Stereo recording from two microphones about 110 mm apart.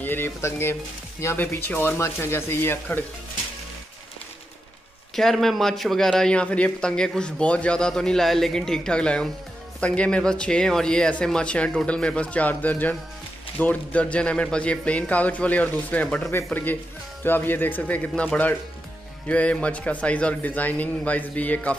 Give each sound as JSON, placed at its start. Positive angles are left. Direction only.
{"t": 0.0, "sound": "speech", "side_deg": 20}
{"t": 5.1, "sound": "a man's voice", "side_deg": 5}